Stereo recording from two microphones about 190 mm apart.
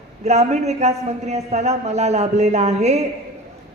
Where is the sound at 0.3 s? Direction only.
35° right (ahead or behind).